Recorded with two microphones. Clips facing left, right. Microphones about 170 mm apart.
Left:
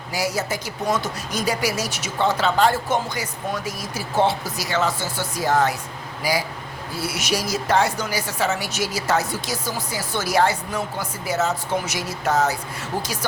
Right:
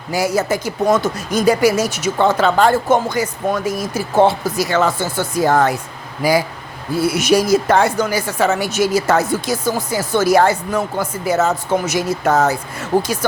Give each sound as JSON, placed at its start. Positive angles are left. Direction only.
{"t": 0.1, "sound": "a woman's voice", "side_deg": -50}